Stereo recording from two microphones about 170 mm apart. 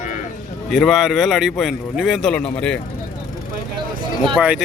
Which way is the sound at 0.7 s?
Centre (ahead or behind).